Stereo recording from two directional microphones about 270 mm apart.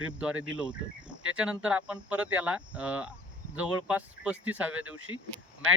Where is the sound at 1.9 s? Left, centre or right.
Centre.